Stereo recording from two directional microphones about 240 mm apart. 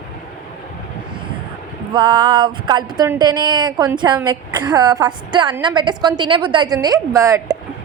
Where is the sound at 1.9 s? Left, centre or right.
Centre.